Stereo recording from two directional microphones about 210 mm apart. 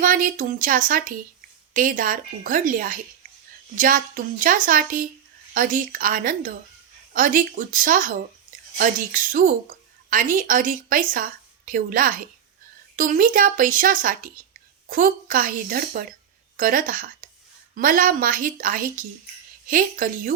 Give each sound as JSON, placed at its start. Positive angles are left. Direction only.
{"t": 0.0, "sound": "a woman's voice", "side_deg": -40}